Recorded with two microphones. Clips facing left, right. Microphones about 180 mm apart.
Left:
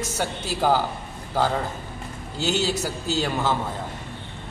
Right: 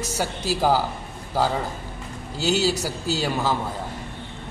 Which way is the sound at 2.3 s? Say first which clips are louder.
Right 2 dB; 40° right (ahead or behind).